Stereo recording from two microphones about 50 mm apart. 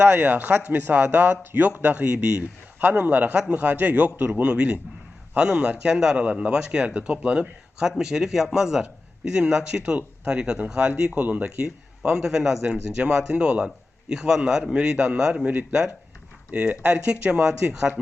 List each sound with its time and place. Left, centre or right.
0.0 s a man's voice: right